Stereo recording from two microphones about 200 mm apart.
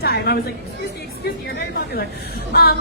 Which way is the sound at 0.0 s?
50° left (ahead or behind).